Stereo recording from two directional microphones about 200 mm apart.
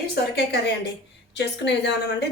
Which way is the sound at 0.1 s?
55° left (ahead or behind).